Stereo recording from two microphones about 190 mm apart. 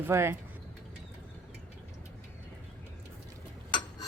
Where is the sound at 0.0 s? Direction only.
15° right (ahead or behind).